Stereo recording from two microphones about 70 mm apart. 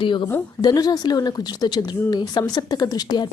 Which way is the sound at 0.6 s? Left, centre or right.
Left.